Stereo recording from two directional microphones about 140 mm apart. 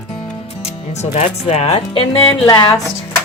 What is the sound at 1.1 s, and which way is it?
Speech, 50° left (ahead or behind).